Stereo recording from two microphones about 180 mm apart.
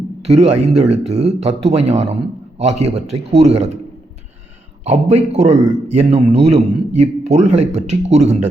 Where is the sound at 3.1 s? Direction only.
35° right (ahead or behind).